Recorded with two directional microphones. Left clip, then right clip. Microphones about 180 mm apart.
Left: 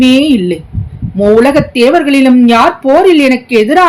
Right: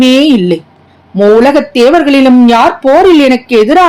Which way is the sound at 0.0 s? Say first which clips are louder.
Right 2 dB; 45° right (ahead or behind).